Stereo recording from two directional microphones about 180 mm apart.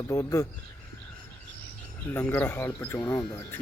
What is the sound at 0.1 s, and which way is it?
Speech, 20° left (ahead or behind).